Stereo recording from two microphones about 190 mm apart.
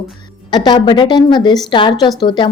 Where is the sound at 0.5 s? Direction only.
25° left (ahead or behind).